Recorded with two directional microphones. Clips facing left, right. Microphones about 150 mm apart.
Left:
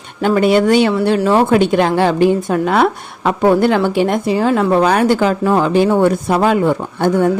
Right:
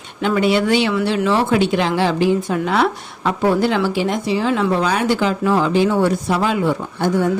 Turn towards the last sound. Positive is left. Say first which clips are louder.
# left 4 dB
turn(degrees=55)  # may be behind; listen again after turning